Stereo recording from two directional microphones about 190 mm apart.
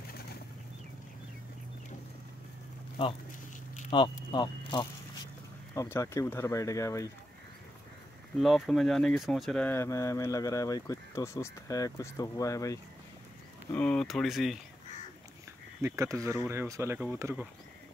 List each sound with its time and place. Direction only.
3.9 s speech: 25° left (ahead or behind)
4.3 s a sound: 25° left (ahead or behind)
5.8 s speech: 15° left (ahead or behind)
8.4 s speech: centre (ahead or behind); by 12.7 s 15° left (ahead or behind)
13.7 s speech: 5° left (ahead or behind)
15.8 s speech: 15° right (ahead or behind)